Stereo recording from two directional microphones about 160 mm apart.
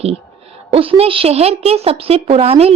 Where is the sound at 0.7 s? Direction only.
35° right (ahead or behind).